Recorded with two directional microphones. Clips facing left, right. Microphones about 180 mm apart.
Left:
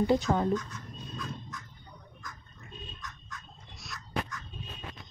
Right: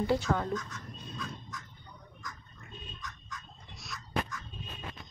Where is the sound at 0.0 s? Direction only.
20° left (ahead or behind).